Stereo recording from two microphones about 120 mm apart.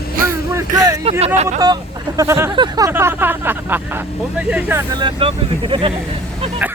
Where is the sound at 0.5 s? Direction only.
30° right (ahead or behind).